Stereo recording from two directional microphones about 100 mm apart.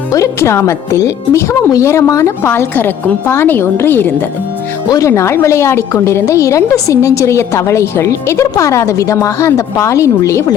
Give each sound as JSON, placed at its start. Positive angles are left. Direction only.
{"t": 0.1, "sound": "a woman's voice", "side_deg": 30}
{"t": 4.9, "sound": "a woman's voice", "side_deg": 35}